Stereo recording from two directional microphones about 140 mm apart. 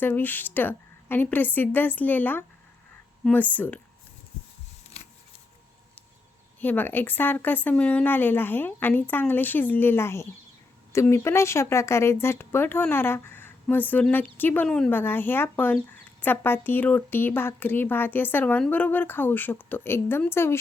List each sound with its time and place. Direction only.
0.0 s speech: 15° left (ahead or behind)
6.6 s speech: 15° left (ahead or behind)